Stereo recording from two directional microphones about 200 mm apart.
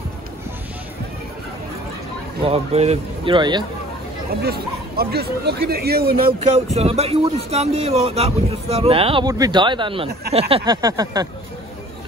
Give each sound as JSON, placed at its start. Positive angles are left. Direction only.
{"t": 2.4, "sound": "a man's voice", "side_deg": -30}
{"t": 4.4, "sound": "speech", "side_deg": -50}
{"t": 6.7, "sound": "a man's voice", "side_deg": -30}